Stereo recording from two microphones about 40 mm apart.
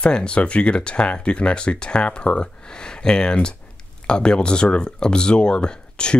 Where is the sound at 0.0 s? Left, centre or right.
Left.